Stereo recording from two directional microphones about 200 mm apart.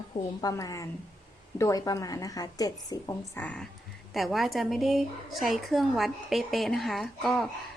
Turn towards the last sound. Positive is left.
turn(degrees=0)  # may be behind; listen again after turning